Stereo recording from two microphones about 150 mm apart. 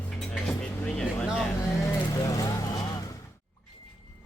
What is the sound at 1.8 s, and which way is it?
Speech, 20° left (ahead or behind).